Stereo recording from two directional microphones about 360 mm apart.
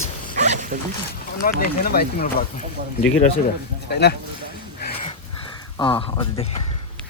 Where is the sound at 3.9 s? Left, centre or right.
Left.